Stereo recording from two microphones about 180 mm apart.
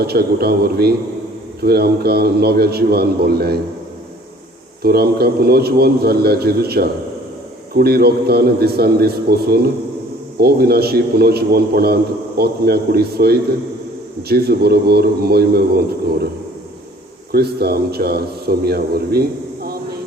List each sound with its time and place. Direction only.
0.0 s a man's voice: 60° right (ahead or behind)
4.8 s a man's voice: 60° right (ahead or behind)
17.3 s a man's voice: 60° right (ahead or behind)